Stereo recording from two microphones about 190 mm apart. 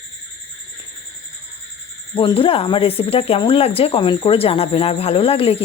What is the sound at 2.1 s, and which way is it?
Speech, 25° left (ahead or behind).